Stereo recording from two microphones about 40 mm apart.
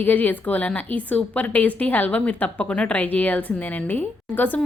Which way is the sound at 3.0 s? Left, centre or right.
Left.